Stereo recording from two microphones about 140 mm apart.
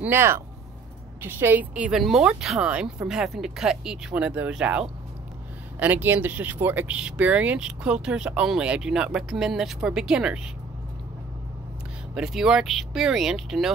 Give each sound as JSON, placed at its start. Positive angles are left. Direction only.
{"t": 0.0, "sound": "speech", "side_deg": -15}
{"t": 12.1, "sound": "speech", "side_deg": -5}